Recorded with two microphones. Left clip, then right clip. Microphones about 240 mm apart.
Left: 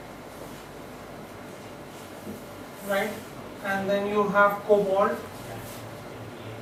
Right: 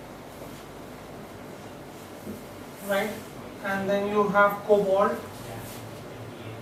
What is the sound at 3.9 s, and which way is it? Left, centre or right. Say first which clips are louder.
Speech: right 1 dB; centre.